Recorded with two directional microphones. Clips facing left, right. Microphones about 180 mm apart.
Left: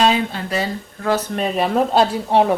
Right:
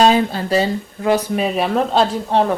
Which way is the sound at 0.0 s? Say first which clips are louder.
Right 4 dB; 40° right (ahead or behind).